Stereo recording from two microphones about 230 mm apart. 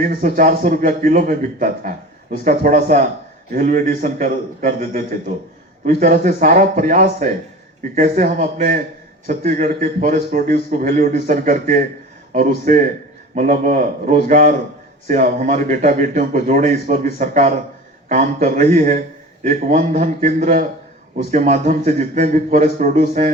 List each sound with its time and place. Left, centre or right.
0.0 s a man's voice: right